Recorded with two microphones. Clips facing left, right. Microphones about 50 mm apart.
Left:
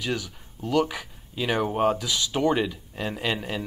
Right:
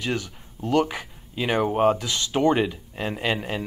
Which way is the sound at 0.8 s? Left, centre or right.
Right.